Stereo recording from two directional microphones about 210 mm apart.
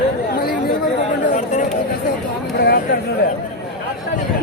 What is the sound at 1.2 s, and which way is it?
Chatter, 40° left (ahead or behind).